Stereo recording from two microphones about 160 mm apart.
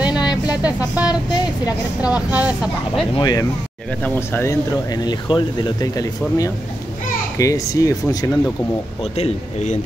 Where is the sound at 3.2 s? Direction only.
25° left (ahead or behind).